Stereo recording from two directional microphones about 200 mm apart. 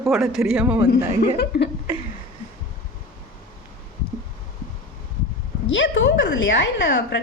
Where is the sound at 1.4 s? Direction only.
55° left (ahead or behind).